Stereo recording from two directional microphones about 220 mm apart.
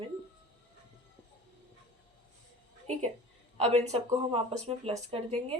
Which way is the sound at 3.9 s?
25° right (ahead or behind).